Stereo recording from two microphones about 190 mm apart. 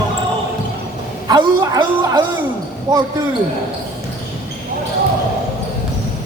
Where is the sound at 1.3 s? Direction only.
20° right (ahead or behind).